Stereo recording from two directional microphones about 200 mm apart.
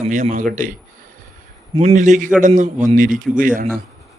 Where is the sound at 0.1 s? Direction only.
40° right (ahead or behind).